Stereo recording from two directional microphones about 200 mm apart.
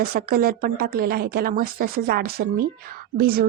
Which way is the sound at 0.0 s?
50° right (ahead or behind).